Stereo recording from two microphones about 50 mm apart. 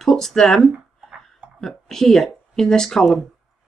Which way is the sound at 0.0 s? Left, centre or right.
Centre.